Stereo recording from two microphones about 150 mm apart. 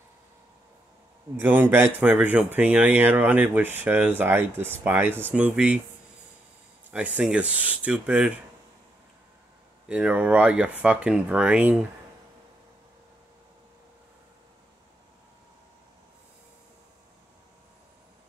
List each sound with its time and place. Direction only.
1.3 s speech: 15° right (ahead or behind)
6.9 s speech: 10° right (ahead or behind)
9.8 s speech: 10° right (ahead or behind)